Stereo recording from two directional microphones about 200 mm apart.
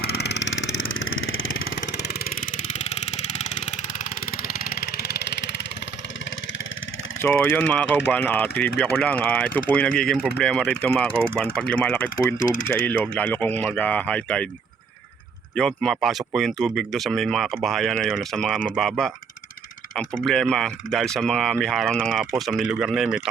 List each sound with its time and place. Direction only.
0.0 s vehicle: 55° left (ahead or behind)
2.7 s vehicle: 35° left (ahead or behind)
7.2 s speech: 10° left (ahead or behind)
15.5 s speech: 5° left (ahead or behind)